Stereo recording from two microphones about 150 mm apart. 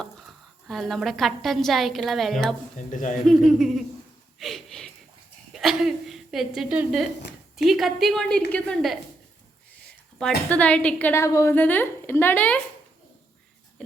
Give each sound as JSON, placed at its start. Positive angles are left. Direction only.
{"t": 0.0, "sound": "a woman's voice", "side_deg": 0}
{"t": 2.7, "sound": "speech", "side_deg": 55}
{"t": 3.2, "sound": "a woman's voice", "side_deg": 0}
{"t": 4.4, "sound": "a sound", "side_deg": 0}
{"t": 5.5, "sound": "a woman's voice", "side_deg": 0}
{"t": 10.2, "sound": "a woman's voice", "side_deg": 5}